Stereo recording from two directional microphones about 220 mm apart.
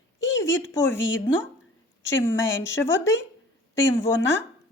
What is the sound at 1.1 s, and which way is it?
Speech, 60° left (ahead or behind).